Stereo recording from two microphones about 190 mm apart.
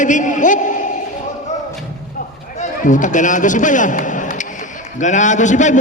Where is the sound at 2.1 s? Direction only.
40° left (ahead or behind).